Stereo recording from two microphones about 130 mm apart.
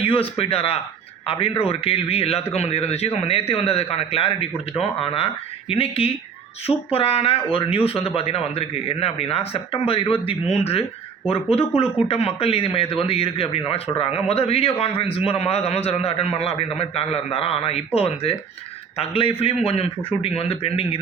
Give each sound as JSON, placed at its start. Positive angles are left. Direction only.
{"t": 0.0, "sound": "a man's voice", "side_deg": 45}